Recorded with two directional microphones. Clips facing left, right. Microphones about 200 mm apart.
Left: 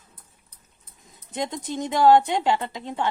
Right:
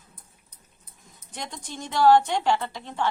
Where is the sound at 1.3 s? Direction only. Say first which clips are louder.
Left 9 dB; 20° left (ahead or behind).